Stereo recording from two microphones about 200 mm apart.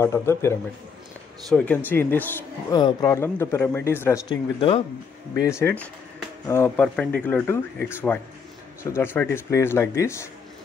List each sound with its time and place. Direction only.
0.0 s a man's voice: 15° left (ahead or behind)
2.7 s a man's voice: 20° left (ahead or behind)
5.4 s a man's voice: 15° left (ahead or behind)